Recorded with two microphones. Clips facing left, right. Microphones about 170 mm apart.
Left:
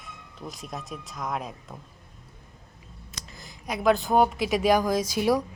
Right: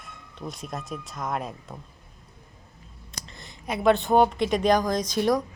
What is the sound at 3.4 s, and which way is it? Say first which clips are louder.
A woman's voice: right 2 dB; centre (ahead or behind).